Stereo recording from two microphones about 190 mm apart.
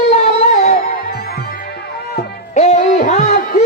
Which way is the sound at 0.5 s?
40° left (ahead or behind).